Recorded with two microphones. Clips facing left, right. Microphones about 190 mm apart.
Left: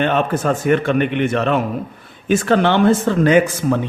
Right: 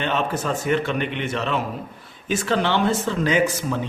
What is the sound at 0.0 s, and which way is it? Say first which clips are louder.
A man's voice: left 6 dB; 55° left (ahead or behind).